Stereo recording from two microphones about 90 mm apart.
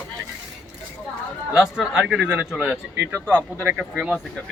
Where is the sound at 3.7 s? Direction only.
15° right (ahead or behind).